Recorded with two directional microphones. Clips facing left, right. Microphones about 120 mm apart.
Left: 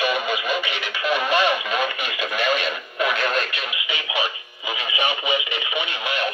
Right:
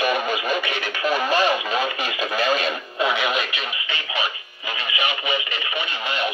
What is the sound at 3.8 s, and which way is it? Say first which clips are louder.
Speech: left 3 dB; 15° left (ahead or behind).